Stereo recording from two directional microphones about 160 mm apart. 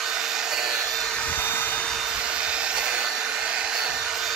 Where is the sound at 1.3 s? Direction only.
15° left (ahead or behind).